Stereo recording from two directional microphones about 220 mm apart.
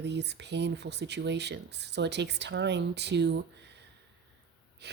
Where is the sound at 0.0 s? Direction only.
50° right (ahead or behind).